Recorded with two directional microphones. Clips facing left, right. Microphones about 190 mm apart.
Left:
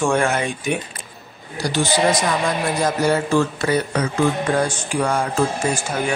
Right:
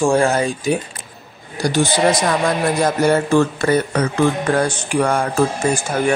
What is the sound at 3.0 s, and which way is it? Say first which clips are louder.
Speech: right 4 dB; 55° right (ahead or behind).